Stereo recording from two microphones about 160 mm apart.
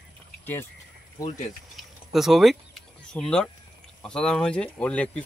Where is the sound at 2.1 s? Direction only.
Centre (ahead or behind).